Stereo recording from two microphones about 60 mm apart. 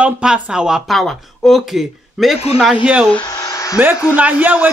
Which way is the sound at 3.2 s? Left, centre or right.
Left.